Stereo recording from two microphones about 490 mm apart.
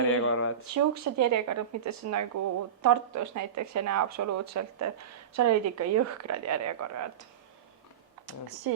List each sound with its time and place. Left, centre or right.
0.1 s speech: left
0.7 s speech: right
8.3 s speech: right